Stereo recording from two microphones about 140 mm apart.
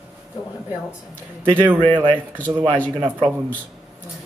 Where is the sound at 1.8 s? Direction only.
40° right (ahead or behind).